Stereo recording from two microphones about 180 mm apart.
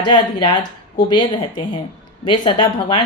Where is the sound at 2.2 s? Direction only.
25° left (ahead or behind).